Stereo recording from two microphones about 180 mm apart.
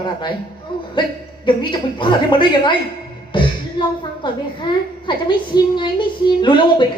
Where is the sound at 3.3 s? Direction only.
25° left (ahead or behind).